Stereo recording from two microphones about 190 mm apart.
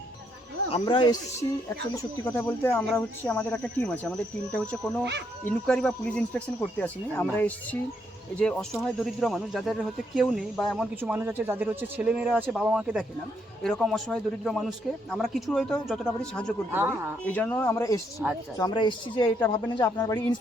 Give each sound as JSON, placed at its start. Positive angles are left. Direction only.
{"t": 0.7, "sound": "speech", "side_deg": 25}
{"t": 16.7, "sound": "speech", "side_deg": -10}
{"t": 17.2, "sound": "speech", "side_deg": 10}